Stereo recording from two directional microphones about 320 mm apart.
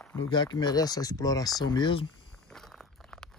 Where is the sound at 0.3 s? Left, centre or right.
Centre.